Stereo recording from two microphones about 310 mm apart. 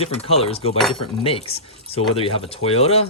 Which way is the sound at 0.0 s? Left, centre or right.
Centre.